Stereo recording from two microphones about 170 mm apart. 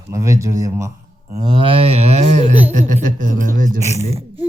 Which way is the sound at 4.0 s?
35° right (ahead or behind).